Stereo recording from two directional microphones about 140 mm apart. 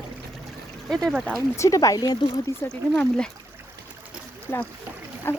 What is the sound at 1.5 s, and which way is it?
Speech, 20° left (ahead or behind).